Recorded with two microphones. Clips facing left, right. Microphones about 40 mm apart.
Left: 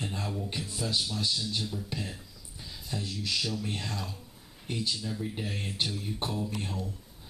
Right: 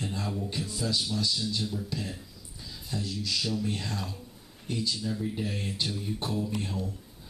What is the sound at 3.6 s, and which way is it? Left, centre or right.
Speech, centre.